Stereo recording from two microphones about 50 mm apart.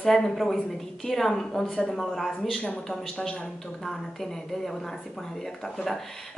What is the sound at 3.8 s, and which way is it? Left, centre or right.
Speech, centre.